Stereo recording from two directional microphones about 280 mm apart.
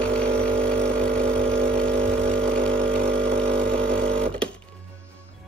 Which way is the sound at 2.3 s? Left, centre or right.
Centre.